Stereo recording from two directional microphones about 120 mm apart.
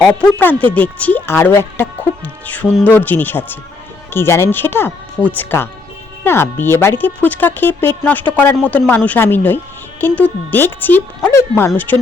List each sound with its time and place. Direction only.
0.0 s speech: 10° left (ahead or behind)